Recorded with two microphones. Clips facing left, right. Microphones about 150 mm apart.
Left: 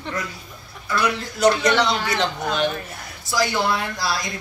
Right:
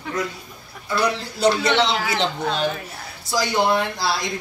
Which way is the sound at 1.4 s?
25° right (ahead or behind).